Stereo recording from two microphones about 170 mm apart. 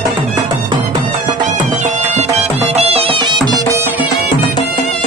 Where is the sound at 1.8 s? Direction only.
45° right (ahead or behind).